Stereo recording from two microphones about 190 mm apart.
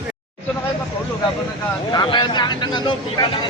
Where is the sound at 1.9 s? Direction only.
25° left (ahead or behind).